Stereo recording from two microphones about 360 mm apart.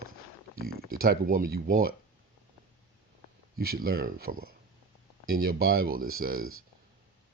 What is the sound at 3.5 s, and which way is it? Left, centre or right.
Speech, right.